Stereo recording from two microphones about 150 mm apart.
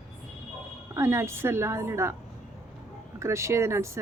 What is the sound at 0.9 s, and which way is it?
A woman's voice, 20° right (ahead or behind).